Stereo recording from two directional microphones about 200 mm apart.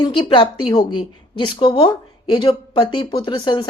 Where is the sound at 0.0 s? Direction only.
25° left (ahead or behind).